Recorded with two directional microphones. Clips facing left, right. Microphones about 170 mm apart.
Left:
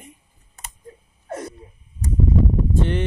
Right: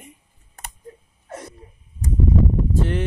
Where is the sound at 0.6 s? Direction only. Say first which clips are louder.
Right 2 dB; 55° right (ahead or behind).